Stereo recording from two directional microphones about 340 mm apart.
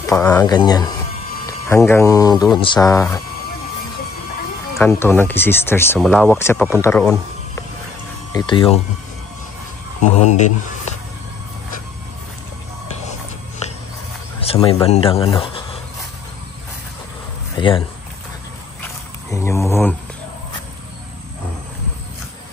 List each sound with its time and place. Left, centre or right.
0.0 s speech: centre
4.7 s speech: centre
10.0 s speech: centre
14.4 s speech: centre
17.6 s speech: centre
19.3 s a sound: centre